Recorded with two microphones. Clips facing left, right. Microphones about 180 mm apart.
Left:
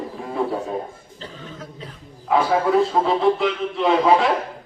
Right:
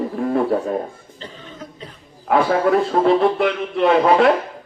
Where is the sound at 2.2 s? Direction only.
60° right (ahead or behind).